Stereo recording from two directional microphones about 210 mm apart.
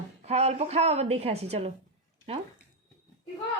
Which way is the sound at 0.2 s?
30° right (ahead or behind).